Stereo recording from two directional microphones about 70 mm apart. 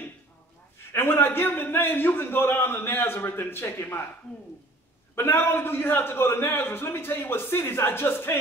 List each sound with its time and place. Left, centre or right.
0.9 s a man's voice: left
5.1 s a man's voice: left